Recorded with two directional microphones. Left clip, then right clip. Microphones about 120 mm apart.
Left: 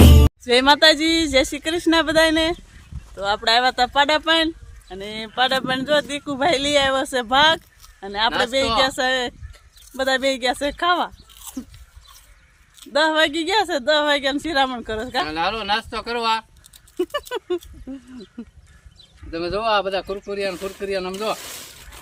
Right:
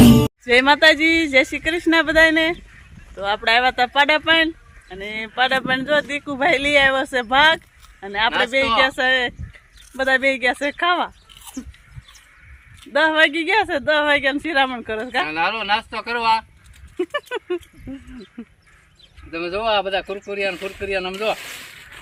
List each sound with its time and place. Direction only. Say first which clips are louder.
0.0 s speech: right 4 dB; centre (ahead or behind)
12.9 s speech: right 2 dB; 5° right (ahead or behind)
15.3 s speech: right 3 dB; 30° left (ahead or behind)
17.0 s speech: even; centre (ahead or behind)
19.3 s speech: even; 35° left (ahead or behind)
21.5 s a sound: right 2 dB; 30° left (ahead or behind)